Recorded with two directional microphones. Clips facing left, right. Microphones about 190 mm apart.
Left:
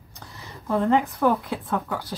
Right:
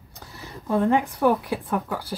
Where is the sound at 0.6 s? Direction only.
15° right (ahead or behind).